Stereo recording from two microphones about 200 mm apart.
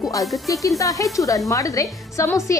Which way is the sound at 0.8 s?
15° left (ahead or behind).